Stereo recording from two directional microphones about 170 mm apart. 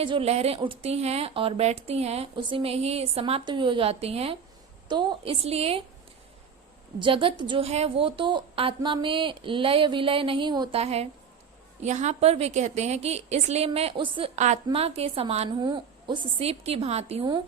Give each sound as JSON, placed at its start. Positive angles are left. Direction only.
{"t": 0.0, "sound": "speech", "side_deg": -35}
{"t": 7.0, "sound": "speech", "side_deg": -30}